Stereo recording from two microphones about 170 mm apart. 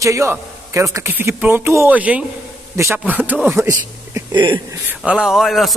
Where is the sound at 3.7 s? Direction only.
25° right (ahead or behind).